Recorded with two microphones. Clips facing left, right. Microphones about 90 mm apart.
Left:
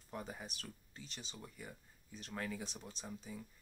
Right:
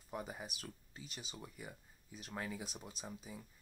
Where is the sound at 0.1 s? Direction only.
10° right (ahead or behind).